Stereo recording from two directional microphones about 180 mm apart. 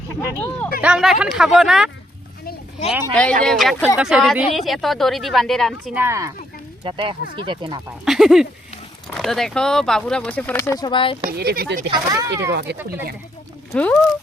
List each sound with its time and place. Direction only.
0.2 s speech: 15° left (ahead or behind)
0.8 s speech: 5° right (ahead or behind)
3.4 s speech: centre (ahead or behind)
6.0 s speech: 15° right (ahead or behind)
6.8 s speech: 30° right (ahead or behind)
8.0 s speech: centre (ahead or behind); by 11.2 s 30° left (ahead or behind)
11.3 s speech: 60° right (ahead or behind)
11.9 s speech: 20° right (ahead or behind)
12.5 s speech: 65° right (ahead or behind)
13.7 s speech: 5° left (ahead or behind)